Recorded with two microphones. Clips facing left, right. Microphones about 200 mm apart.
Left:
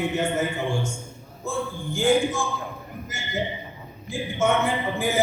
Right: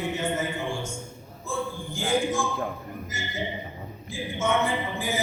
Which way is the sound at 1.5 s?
65° left (ahead or behind).